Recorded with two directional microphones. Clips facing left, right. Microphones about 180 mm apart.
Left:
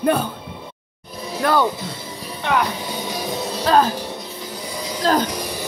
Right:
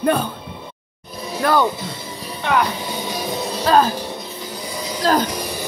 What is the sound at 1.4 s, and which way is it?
Music, centre (ahead or behind).